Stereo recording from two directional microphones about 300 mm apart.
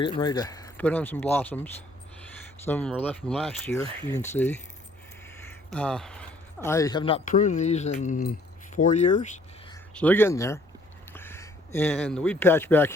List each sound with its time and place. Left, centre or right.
0.0 s speech: centre
5.5 s a sound: centre
6.7 s speech: centre
9.9 s speech: centre